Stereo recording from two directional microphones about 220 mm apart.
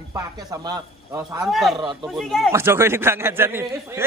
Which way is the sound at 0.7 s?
15° right (ahead or behind).